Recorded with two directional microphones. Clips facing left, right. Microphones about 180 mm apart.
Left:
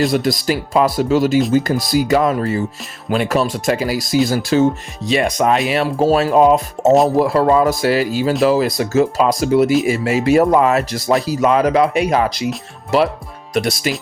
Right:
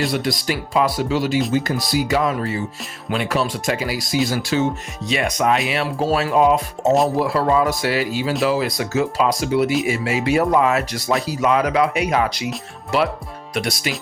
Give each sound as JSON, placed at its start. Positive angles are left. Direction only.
{"t": 0.0, "sound": "speech", "side_deg": 40}
{"t": 13.5, "sound": "speech", "side_deg": 40}